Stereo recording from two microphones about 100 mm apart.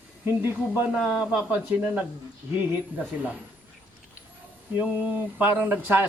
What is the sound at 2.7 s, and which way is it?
Speech, 15° right (ahead or behind).